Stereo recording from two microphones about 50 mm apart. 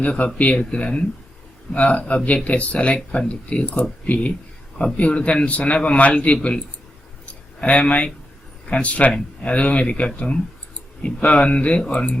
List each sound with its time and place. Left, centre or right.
0.3 s a man's voice: left
1.7 s a man's voice: left
7.3 s a sound: left
8.7 s a man's voice: left